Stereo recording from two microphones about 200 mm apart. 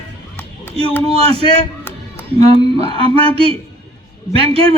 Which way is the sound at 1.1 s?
30° right (ahead or behind).